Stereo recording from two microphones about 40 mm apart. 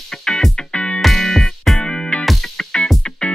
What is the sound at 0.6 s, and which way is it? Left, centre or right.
Music, left.